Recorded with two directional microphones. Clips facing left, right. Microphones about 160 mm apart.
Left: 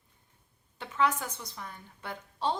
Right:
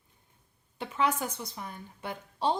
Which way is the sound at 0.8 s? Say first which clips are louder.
Even; 15° right (ahead or behind).